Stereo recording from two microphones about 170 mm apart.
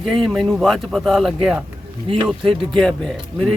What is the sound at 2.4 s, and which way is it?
Speech, 30° right (ahead or behind).